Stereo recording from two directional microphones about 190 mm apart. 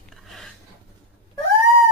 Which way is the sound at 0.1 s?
Centre (ahead or behind).